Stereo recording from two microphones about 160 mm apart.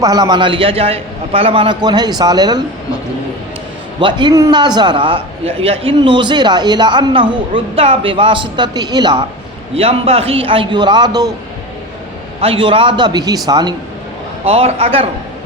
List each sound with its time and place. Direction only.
0.0 s a man's voice: 25° right (ahead or behind)
4.0 s a man's voice: 25° right (ahead or behind)
9.7 s a man's voice: 40° right (ahead or behind); by 11.3 s 25° right (ahead or behind)
12.4 s a man's voice: 35° right (ahead or behind)
14.4 s a man's voice: 40° right (ahead or behind)